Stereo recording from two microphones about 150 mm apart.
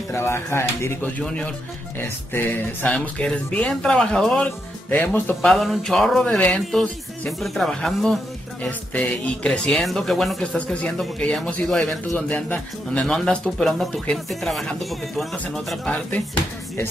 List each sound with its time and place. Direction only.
0.1 s speech: 15° left (ahead or behind)
5.5 s speech: centre (ahead or behind)